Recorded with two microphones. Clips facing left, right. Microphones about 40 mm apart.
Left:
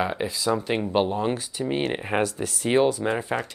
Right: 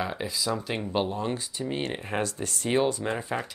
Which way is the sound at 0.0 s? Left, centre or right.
Centre.